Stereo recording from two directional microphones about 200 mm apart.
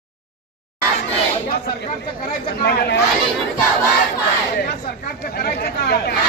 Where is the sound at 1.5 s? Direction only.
50° left (ahead or behind).